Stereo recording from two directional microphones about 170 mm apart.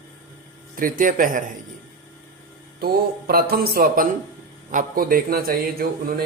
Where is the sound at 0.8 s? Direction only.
55° right (ahead or behind).